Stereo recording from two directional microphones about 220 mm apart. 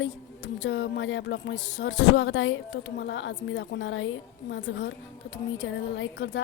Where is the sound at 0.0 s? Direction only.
55° left (ahead or behind).